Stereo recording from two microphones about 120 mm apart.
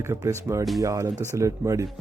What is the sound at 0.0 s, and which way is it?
Speech, 25° right (ahead or behind).